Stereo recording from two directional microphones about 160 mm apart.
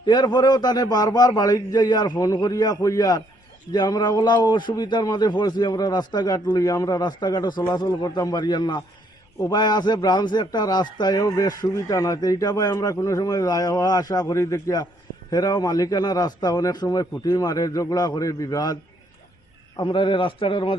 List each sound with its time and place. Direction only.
0.0 s a man's voice: 25° left (ahead or behind)